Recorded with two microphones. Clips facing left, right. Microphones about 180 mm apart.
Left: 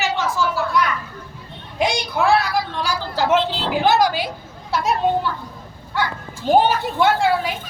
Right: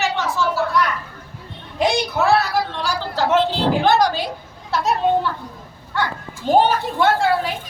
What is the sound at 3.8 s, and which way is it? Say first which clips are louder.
Speech: left 3 dB; 5° left (ahead or behind).